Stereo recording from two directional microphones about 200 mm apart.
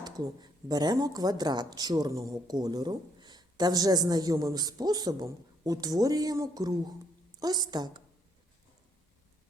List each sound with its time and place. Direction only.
0.0 s speech: 20° right (ahead or behind)